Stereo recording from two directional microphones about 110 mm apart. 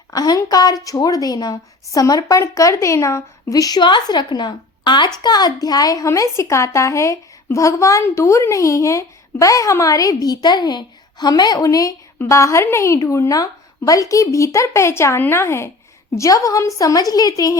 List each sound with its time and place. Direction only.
0.1 s a woman's voice: 35° left (ahead or behind)